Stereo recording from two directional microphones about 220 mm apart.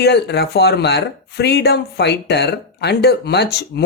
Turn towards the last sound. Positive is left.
turn(degrees=50)  # may be behind; listen again after turning